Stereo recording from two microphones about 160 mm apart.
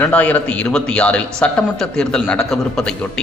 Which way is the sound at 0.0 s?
10° left (ahead or behind).